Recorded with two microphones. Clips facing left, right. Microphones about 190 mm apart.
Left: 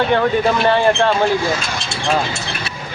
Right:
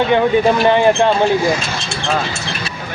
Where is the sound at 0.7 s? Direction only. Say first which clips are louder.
Right 1 dB; 15° right (ahead or behind).